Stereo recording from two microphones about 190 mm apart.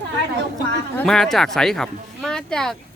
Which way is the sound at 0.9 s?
5° left (ahead or behind).